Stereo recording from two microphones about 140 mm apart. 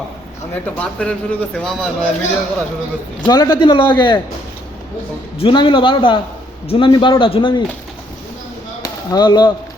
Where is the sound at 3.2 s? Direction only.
30° left (ahead or behind).